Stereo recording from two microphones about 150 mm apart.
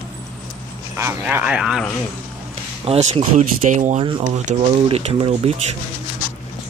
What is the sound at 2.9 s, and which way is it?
Speech, 50° right (ahead or behind).